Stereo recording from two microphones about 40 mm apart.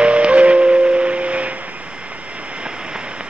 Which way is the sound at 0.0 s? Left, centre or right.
Right.